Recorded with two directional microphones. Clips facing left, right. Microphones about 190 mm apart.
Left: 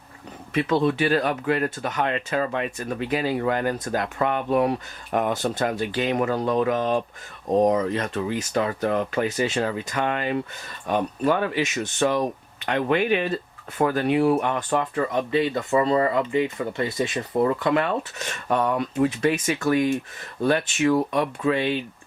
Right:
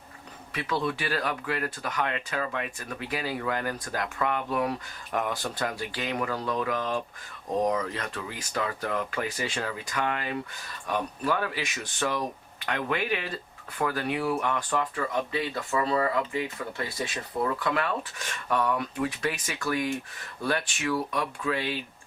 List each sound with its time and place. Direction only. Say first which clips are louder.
0.5 s speech: left 8 dB; 25° left (ahead or behind)